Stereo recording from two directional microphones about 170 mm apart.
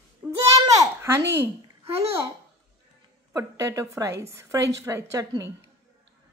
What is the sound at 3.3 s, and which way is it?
A woman's voice, 20° right (ahead or behind).